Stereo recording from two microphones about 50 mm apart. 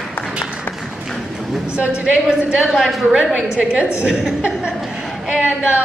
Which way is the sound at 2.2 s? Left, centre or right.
Centre.